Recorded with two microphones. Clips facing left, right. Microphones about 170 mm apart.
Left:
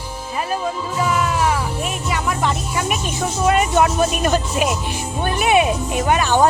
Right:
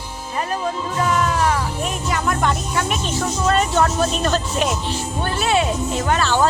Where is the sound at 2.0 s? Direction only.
5° left (ahead or behind).